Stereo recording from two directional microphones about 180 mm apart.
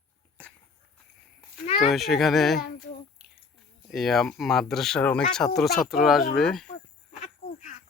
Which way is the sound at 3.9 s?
Centre (ahead or behind).